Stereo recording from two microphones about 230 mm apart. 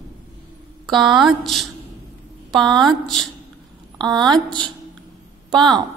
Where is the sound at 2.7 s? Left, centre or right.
Centre.